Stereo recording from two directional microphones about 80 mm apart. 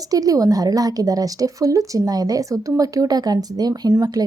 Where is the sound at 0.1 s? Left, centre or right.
Right.